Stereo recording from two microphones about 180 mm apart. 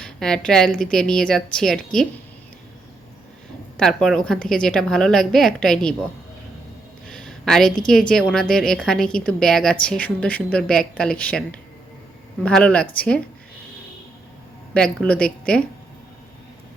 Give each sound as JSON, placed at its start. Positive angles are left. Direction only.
{"t": 0.0, "sound": "a woman's voice", "side_deg": 5}
{"t": 3.8, "sound": "a woman's voice", "side_deg": 5}
{"t": 7.1, "sound": "a woman's voice", "side_deg": 5}
{"t": 15.0, "sound": "a woman's voice", "side_deg": 5}